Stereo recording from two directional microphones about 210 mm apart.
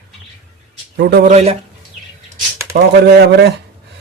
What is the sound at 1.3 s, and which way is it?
Speech, 30° right (ahead or behind).